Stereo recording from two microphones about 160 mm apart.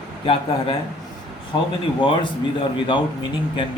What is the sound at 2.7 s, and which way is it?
Speech, 30° left (ahead or behind).